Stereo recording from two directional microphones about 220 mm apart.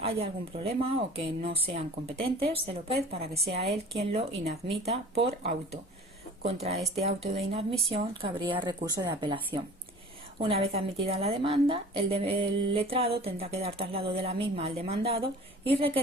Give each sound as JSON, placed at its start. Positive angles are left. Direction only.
{"t": 0.0, "sound": "speech", "side_deg": -25}